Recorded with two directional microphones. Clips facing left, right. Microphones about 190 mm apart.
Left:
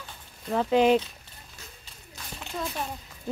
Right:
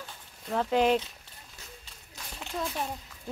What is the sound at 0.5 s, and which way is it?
Speech, centre (ahead or behind).